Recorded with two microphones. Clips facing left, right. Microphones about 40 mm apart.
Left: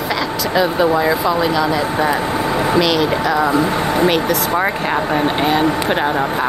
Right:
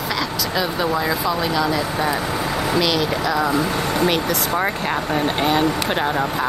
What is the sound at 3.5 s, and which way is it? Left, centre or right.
Speech, left.